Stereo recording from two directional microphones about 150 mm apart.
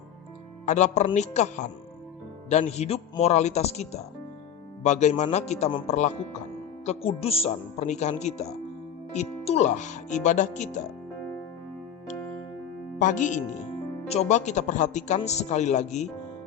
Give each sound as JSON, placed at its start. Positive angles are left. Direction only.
{"t": 0.6, "sound": "speech", "side_deg": 50}
{"t": 6.8, "sound": "speech", "side_deg": 40}
{"t": 12.1, "sound": "music", "side_deg": 15}
{"t": 13.0, "sound": "a woman's voice", "side_deg": 55}